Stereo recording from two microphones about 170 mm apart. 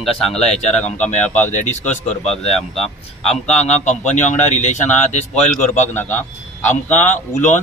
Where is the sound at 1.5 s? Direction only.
45° left (ahead or behind).